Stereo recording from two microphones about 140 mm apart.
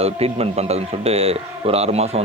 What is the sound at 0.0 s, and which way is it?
A man's voice, 45° right (ahead or behind).